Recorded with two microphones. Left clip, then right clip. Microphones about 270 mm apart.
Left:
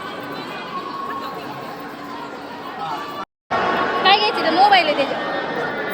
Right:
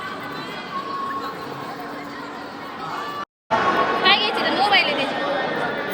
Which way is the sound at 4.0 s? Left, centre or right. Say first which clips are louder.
Left 5 dB; left.